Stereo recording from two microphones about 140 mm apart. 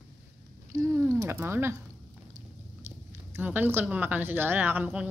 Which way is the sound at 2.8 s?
15° right (ahead or behind).